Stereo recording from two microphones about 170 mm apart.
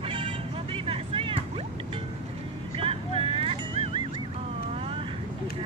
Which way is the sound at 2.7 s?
35° right (ahead or behind).